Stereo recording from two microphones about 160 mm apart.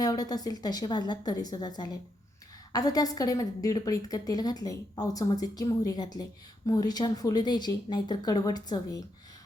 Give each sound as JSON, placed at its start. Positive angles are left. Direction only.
{"t": 0.0, "sound": "a woman's voice", "side_deg": 25}